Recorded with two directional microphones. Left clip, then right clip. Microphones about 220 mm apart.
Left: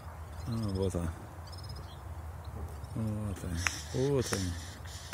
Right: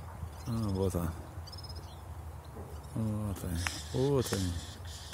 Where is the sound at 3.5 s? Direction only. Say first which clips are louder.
Left 2 dB; 25° left (ahead or behind).